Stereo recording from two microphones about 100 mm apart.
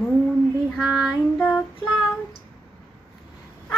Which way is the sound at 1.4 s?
10° left (ahead or behind).